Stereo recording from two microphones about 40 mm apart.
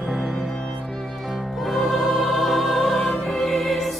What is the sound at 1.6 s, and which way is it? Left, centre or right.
Music, centre.